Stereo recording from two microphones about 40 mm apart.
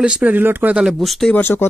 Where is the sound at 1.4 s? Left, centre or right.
Left.